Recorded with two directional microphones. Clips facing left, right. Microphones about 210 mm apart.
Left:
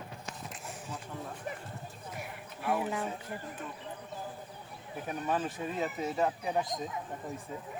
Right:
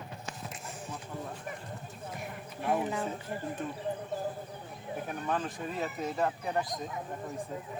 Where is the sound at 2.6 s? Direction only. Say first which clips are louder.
Right 2 dB; 40° right (ahead or behind).